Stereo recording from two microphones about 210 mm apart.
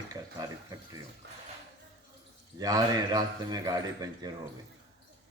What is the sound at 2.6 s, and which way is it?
Speech, 15° right (ahead or behind).